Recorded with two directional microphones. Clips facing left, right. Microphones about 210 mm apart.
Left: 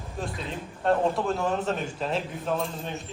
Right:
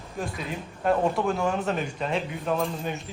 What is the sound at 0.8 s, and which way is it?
Speech, centre (ahead or behind).